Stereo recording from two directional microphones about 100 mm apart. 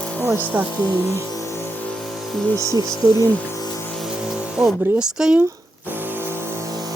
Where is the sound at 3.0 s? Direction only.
35° right (ahead or behind).